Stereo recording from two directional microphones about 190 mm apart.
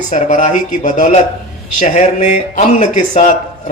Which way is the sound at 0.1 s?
40° left (ahead or behind).